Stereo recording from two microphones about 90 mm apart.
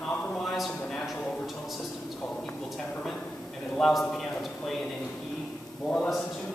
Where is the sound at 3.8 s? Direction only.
5° left (ahead or behind).